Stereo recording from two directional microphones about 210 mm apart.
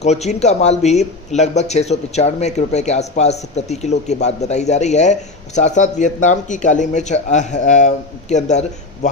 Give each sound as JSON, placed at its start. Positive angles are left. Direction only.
{"t": 0.0, "sound": "speech", "side_deg": 30}